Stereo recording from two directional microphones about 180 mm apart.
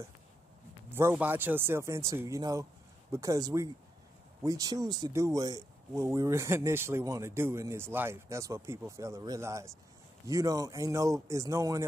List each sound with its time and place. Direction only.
0.8 s speech: 15° right (ahead or behind)